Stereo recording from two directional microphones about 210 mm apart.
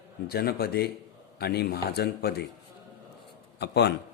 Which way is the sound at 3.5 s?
50° left (ahead or behind).